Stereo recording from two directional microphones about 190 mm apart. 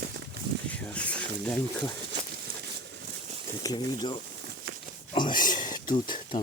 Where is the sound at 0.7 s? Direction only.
5° left (ahead or behind).